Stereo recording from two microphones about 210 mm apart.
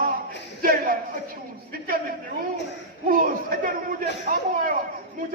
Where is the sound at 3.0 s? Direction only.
40° right (ahead or behind).